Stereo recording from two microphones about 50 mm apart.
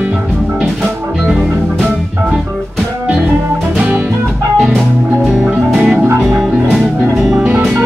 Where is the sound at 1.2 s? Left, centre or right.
Centre.